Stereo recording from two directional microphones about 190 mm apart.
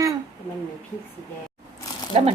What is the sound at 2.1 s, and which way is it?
Speech, 30° right (ahead or behind).